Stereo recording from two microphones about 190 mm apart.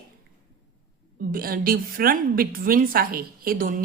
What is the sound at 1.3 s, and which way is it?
A woman's voice, 50° right (ahead or behind).